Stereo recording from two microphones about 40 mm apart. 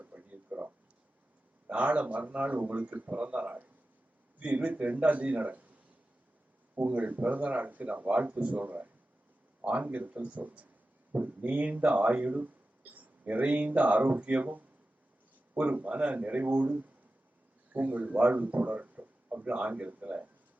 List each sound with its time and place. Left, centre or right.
0.0 s a sound: right
1.6 s speech: right
4.7 s speech: right